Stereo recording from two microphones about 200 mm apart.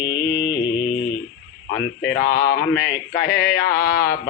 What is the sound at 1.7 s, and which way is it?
Speech, 55° left (ahead or behind).